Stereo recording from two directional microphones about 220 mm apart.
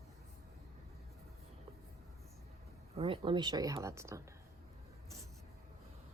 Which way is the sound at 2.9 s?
25° right (ahead or behind).